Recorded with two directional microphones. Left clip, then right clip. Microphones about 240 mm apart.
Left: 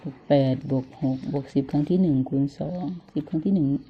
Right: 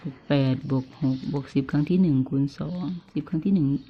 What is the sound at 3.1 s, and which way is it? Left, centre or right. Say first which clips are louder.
Speech: left 1 dB; centre.